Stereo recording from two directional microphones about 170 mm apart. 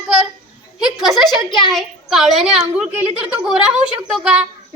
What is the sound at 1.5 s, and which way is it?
Speech, 25° left (ahead or behind).